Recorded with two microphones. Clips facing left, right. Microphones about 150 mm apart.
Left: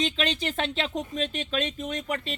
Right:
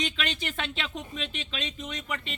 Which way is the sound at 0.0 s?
30° left (ahead or behind).